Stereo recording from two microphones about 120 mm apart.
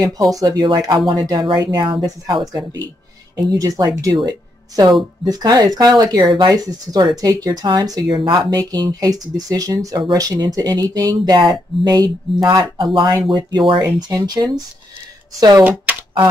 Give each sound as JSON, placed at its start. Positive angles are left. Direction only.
{"t": 0.0, "sound": "speech", "side_deg": -30}
{"t": 3.5, "sound": "speech", "side_deg": -30}
{"t": 15.9, "sound": "a sound", "side_deg": -15}